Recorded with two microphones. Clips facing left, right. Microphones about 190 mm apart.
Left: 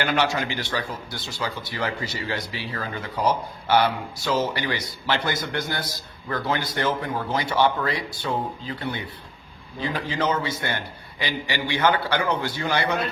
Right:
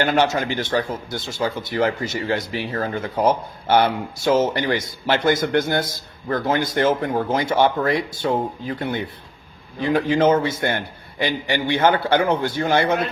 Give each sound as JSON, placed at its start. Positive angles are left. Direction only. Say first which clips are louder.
{"t": 0.0, "sound": "speech", "louder": "right 4 dB", "side_deg": -45}